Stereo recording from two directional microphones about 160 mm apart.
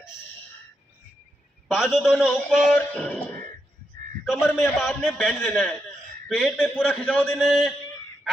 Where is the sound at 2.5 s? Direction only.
5° left (ahead or behind).